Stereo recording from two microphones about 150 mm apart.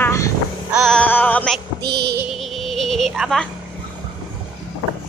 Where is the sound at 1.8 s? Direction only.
90° right.